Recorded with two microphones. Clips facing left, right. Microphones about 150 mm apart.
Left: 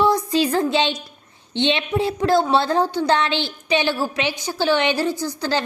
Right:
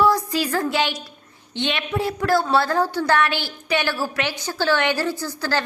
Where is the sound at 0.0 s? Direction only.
25° left (ahead or behind).